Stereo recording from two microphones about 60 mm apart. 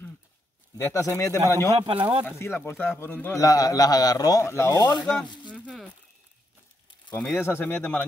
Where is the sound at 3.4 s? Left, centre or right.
Left.